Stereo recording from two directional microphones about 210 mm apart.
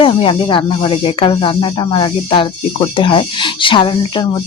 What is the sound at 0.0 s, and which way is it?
Speech, 25° left (ahead or behind).